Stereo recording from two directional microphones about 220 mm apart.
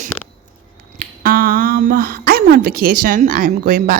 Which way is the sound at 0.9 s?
40° right (ahead or behind).